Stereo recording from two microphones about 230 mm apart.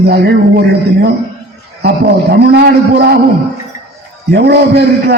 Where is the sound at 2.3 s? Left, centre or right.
Right.